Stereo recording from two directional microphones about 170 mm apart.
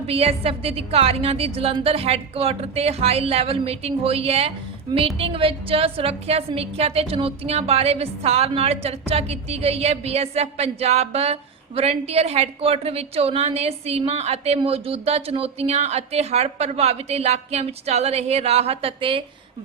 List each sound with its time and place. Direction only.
0.1 s a woman's voice: 35° right (ahead or behind)